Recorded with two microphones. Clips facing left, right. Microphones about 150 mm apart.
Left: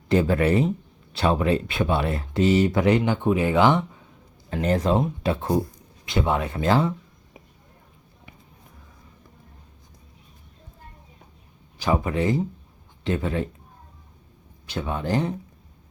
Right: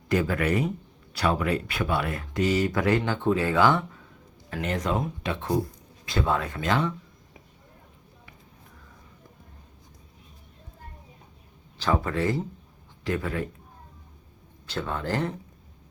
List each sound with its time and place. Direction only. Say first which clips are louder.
0.1 s speech: left 5 dB; 30° left (ahead or behind)
4.4 s speech: left 6 dB; 30° left (ahead or behind)
6.1 s speech: left 3 dB; 20° left (ahead or behind)
11.8 s speech: left 2 dB; 15° left (ahead or behind)
14.7 s speech: left 3 dB; 15° left (ahead or behind)